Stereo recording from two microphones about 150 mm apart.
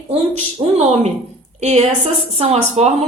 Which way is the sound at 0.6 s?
35° right (ahead or behind).